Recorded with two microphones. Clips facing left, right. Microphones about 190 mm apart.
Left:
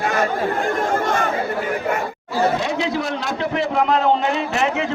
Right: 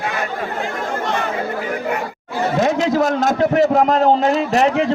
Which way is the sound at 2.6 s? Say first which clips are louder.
Right 6 dB; 45° right (ahead or behind).